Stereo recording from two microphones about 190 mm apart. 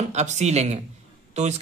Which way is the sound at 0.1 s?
35° right (ahead or behind).